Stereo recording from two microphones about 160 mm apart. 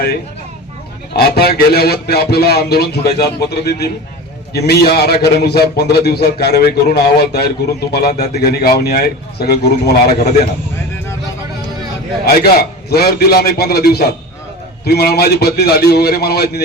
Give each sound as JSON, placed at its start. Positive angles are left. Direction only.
{"t": 1.1, "sound": "a man's voice", "side_deg": 80}
{"t": 12.2, "sound": "a man's voice", "side_deg": 75}